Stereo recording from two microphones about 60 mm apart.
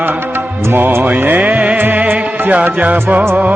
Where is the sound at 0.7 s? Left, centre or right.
Right.